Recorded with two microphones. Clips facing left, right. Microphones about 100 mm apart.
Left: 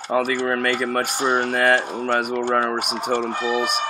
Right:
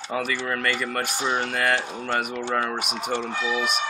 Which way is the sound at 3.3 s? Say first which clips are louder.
Left 4 dB; 45° left (ahead or behind).